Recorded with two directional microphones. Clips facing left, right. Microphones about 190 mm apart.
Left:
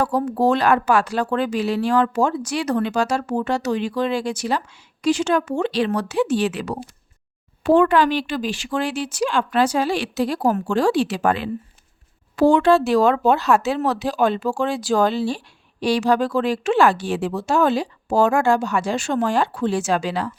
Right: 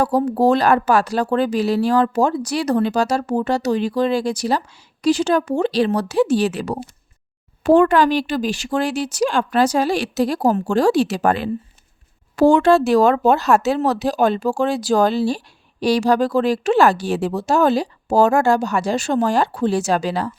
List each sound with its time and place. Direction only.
0.3 s speech: 35° right (ahead or behind)